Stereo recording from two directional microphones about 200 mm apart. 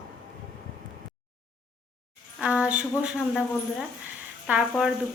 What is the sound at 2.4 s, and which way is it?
Speech, 5° right (ahead or behind).